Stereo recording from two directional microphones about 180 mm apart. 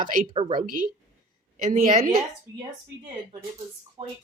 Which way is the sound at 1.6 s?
45° right (ahead or behind).